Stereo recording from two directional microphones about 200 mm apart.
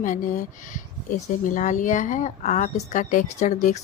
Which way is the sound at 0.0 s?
40° left (ahead or behind).